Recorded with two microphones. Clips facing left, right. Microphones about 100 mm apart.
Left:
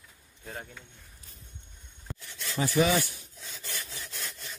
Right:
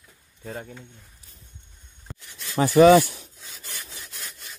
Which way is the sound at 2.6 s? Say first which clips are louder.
Right 11 dB; 60° right (ahead or behind).